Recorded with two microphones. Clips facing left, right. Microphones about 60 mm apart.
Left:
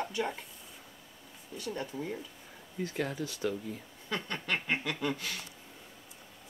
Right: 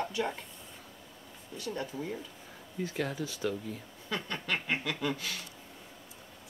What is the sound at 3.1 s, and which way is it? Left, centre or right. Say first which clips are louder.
Speech: even; left.